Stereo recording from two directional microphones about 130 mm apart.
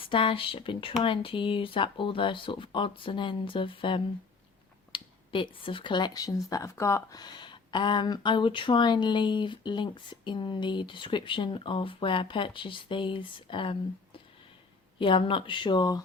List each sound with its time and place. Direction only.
0.0 s speech: 40° left (ahead or behind)